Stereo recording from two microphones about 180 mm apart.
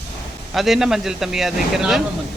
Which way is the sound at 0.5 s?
Centre (ahead or behind).